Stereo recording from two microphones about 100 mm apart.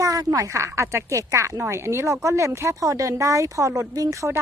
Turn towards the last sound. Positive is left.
turn(degrees=-30)  # may be behind; listen again after turning